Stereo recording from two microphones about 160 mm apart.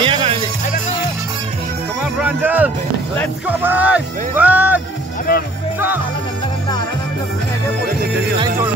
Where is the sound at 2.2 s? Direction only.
10° right (ahead or behind).